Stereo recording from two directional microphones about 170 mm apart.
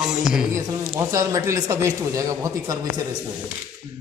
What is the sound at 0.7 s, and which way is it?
Speech, 20° right (ahead or behind).